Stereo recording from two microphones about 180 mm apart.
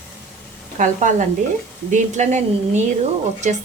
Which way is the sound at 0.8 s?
45° right (ahead or behind).